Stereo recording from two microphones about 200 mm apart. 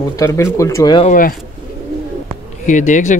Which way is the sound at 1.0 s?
45° left (ahead or behind).